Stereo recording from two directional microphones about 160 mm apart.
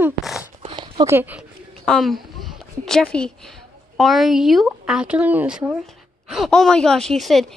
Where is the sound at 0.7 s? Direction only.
30° right (ahead or behind).